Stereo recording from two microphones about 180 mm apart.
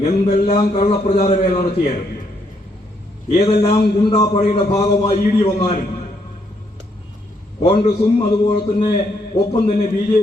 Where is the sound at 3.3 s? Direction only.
30° left (ahead or behind).